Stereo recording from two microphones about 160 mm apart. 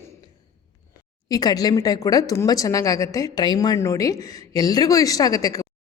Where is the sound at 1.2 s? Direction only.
25° left (ahead or behind).